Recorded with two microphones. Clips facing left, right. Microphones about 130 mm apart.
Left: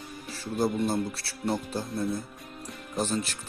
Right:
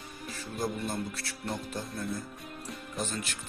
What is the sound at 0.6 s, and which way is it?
Speech, 30° left (ahead or behind).